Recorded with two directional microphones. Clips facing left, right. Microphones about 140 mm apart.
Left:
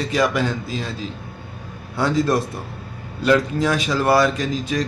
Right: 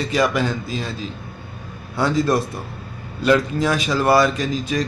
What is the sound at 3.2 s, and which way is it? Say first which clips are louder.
Speech: even; 10° right (ahead or behind).